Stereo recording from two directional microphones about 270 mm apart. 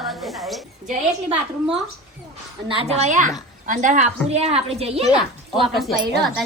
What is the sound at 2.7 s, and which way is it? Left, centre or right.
A woman's voice, right.